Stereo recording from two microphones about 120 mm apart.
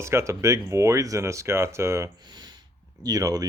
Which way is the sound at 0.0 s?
20° right (ahead or behind).